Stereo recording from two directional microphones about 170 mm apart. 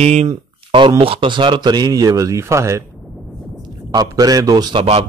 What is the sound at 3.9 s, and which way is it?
Speech, 20° right (ahead or behind).